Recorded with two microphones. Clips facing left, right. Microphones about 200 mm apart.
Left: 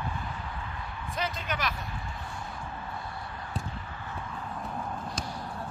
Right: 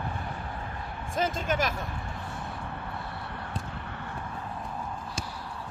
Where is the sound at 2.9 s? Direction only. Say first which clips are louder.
Right 1 dB; 65° right (ahead or behind).